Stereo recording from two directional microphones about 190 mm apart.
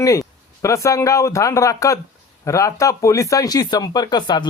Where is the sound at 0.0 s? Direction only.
15° left (ahead or behind).